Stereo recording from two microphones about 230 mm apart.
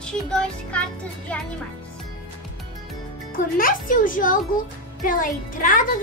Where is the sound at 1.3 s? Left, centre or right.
Centre.